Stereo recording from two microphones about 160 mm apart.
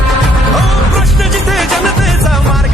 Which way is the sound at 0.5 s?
Centre (ahead or behind).